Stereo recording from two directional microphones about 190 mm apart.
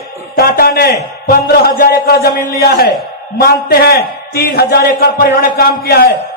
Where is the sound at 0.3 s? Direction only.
50° left (ahead or behind).